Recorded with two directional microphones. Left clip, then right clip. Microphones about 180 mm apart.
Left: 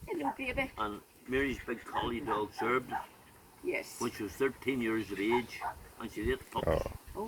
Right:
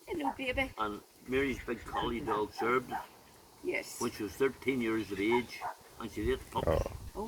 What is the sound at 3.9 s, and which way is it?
Speech, 10° left (ahead or behind).